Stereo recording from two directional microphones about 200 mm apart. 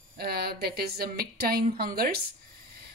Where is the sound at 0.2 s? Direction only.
50° right (ahead or behind).